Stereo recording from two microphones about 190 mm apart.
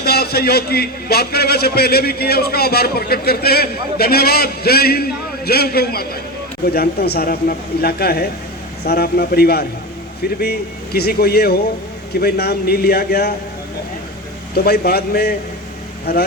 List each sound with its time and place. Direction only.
0.0 s a man's voice: 55° left (ahead or behind)
14.5 s a man's voice: 55° left (ahead or behind)